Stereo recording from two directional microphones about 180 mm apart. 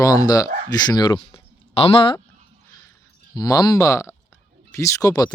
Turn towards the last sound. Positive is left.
turn(degrees=20)  # may be behind; listen again after turning